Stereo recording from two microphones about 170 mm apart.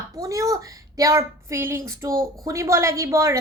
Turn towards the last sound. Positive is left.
turn(degrees=-15)  # may be behind; listen again after turning